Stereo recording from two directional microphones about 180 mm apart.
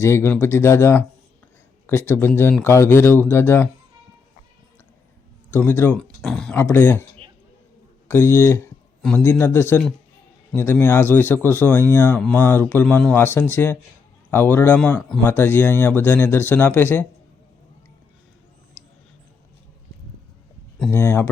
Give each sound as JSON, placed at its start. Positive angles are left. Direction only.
{"t": 0.0, "sound": "speech", "side_deg": 15}
{"t": 5.5, "sound": "speech", "side_deg": 10}
{"t": 7.2, "sound": "basketball bounce", "side_deg": -30}
{"t": 8.0, "sound": "speech", "side_deg": 15}
{"t": 20.9, "sound": "speech", "side_deg": 15}